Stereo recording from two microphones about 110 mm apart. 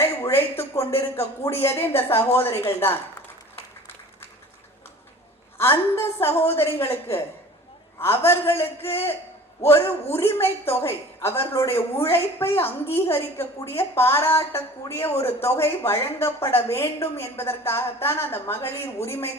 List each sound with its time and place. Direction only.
0.0 s a woman's voice: 25° left (ahead or behind)
6.0 s a woman's voice: 20° left (ahead or behind)